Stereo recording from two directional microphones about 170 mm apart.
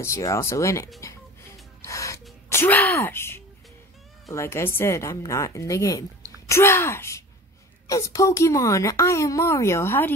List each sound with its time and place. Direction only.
0.0 s a woman's voice: 15° left (ahead or behind)
1.9 s gasp: 20° left (ahead or behind)
2.5 s a woman's voice: 10° left (ahead or behind)